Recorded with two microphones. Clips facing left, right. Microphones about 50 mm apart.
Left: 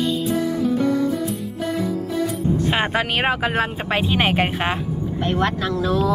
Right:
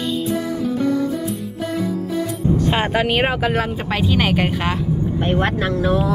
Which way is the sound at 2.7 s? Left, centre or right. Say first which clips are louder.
Right 3 dB; centre.